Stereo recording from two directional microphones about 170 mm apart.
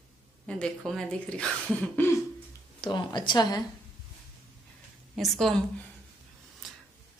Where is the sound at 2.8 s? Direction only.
25° left (ahead or behind).